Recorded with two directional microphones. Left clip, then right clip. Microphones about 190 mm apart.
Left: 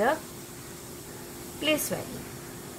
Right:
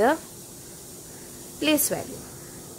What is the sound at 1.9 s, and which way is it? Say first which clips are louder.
Speech: right 4 dB; 45° right (ahead or behind).